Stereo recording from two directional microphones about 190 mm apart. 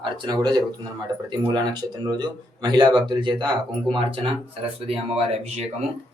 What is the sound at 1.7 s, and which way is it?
Speech, 20° right (ahead or behind).